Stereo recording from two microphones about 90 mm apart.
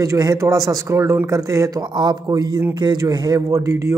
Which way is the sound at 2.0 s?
50° right (ahead or behind).